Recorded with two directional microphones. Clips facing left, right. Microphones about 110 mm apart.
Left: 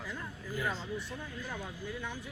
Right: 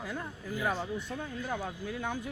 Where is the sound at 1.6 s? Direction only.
50° right (ahead or behind).